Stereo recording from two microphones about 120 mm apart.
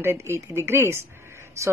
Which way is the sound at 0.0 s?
20° right (ahead or behind).